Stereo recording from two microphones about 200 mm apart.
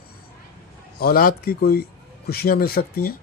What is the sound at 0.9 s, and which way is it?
Speech, 50° left (ahead or behind).